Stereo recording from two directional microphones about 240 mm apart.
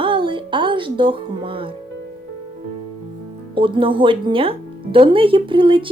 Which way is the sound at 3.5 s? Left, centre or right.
Right.